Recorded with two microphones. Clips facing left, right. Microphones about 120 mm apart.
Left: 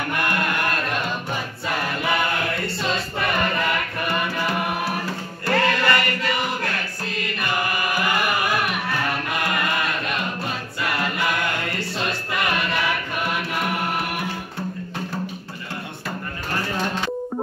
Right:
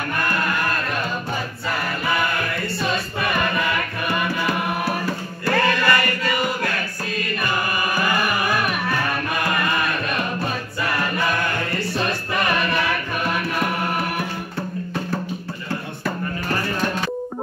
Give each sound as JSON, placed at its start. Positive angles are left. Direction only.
{"t": 5.5, "sound": "music", "side_deg": 20}
{"t": 7.9, "sound": "music", "side_deg": 20}